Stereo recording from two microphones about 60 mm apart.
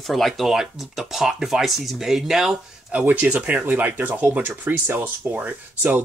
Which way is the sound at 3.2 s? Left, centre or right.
Right.